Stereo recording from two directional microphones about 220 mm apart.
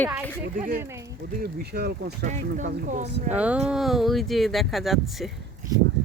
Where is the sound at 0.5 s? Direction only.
40° right (ahead or behind).